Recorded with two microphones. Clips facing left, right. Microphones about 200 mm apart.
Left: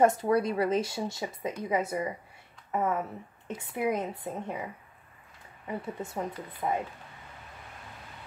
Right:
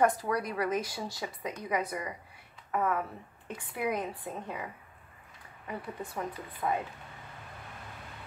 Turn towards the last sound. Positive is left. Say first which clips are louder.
# left 1 dB
turn(degrees=25)  # may be behind; listen again after turning